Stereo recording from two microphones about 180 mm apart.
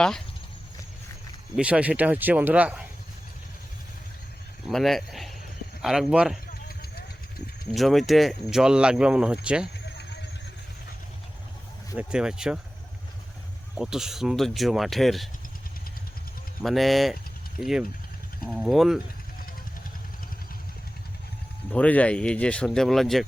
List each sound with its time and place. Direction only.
1.5 s speech: 5° right (ahead or behind)
4.7 s speech: centre (ahead or behind)
7.7 s speech: centre (ahead or behind)
9.8 s vehicle: 70° left (ahead or behind)
11.9 s speech: 5° right (ahead or behind)
13.7 s speech: 5° right (ahead or behind)
16.6 s speech: centre (ahead or behind)
21.7 s speech: 10° left (ahead or behind)